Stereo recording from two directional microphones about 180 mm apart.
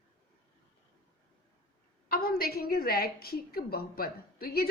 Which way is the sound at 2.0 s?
55° left (ahead or behind).